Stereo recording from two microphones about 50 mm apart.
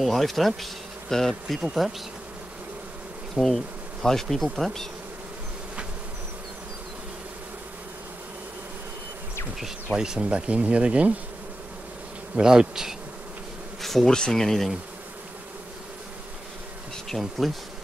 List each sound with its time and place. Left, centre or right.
0.0 s bee: centre
1.6 s bee: centre
3.3 s bee: centre
9.9 s speech: centre
12.4 s bee: centre
13.7 s speech: centre
17.1 s bee: centre